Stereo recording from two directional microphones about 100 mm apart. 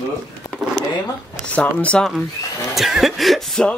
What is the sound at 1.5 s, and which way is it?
Speech, 15° left (ahead or behind).